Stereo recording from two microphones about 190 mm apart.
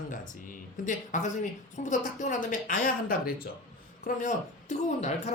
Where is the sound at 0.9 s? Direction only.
40° left (ahead or behind).